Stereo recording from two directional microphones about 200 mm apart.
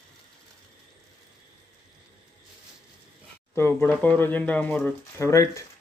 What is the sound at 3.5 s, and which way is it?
A man's voice, 10° left (ahead or behind).